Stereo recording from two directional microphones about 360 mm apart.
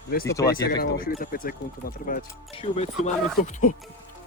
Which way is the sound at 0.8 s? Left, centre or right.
Left.